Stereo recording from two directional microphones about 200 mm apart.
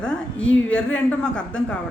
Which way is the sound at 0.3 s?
70° left (ahead or behind).